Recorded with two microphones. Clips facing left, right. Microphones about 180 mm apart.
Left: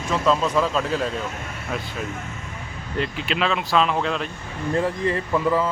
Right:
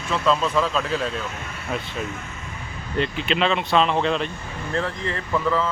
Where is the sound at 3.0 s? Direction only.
Centre (ahead or behind).